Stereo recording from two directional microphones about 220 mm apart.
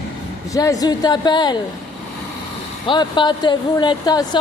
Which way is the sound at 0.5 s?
15° left (ahead or behind).